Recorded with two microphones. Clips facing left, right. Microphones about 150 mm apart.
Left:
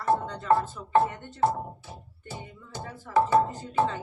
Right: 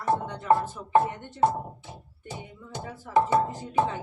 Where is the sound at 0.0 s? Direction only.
15° right (ahead or behind).